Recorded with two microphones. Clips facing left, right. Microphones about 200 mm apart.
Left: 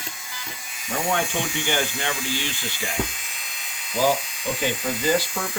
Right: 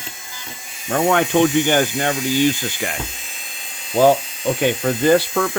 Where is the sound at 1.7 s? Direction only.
45° right (ahead or behind).